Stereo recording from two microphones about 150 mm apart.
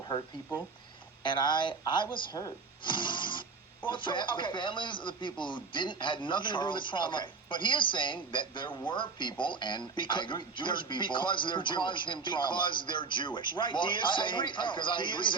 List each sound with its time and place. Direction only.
1.2 s speech: 30° left (ahead or behind)
2.1 s music: 30° left (ahead or behind)
3.8 s speech: 30° left (ahead or behind)